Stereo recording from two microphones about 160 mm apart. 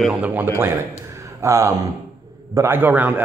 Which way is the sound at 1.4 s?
20° right (ahead or behind).